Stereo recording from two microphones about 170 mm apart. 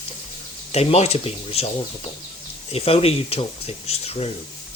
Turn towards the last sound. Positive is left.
turn(degrees=35)  # may be behind; listen again after turning